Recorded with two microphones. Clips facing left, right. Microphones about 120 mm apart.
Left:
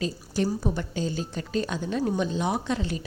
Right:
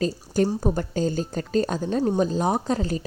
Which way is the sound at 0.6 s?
45° right (ahead or behind).